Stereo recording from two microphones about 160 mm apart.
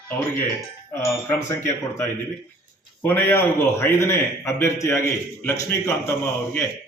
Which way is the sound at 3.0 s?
15° left (ahead or behind).